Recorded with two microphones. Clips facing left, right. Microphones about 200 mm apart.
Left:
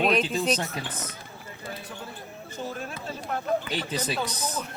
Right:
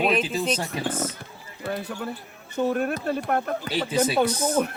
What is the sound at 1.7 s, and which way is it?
Speech, 65° right (ahead or behind).